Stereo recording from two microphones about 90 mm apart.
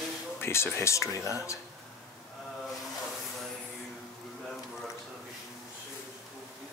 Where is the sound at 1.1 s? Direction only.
40° right (ahead or behind).